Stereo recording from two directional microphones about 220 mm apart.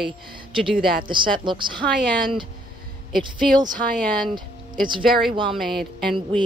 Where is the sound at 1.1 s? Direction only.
20° right (ahead or behind).